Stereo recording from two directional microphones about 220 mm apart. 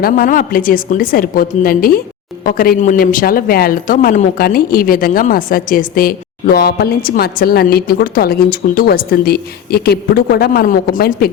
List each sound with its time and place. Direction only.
0.0 s speech: 40° left (ahead or behind)